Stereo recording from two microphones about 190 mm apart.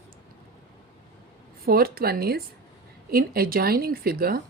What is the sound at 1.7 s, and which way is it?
Speech, 50° right (ahead or behind).